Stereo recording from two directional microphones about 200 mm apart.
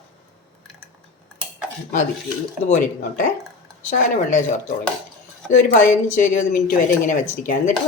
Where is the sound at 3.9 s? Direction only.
40° left (ahead or behind).